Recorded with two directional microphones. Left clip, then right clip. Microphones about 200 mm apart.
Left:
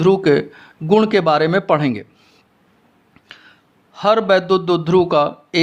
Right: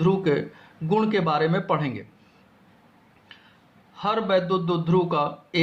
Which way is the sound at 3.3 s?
50° left (ahead or behind).